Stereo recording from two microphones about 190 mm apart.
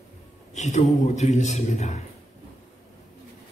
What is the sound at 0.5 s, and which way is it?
A man's voice, 40° left (ahead or behind).